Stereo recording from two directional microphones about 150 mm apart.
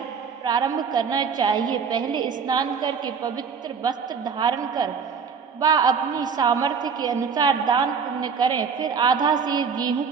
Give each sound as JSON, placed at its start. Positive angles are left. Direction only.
{"t": 0.4, "sound": "a woman's voice", "side_deg": -25}